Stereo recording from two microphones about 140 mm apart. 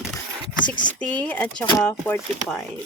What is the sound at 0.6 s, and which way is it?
Speech, 30° left (ahead or behind).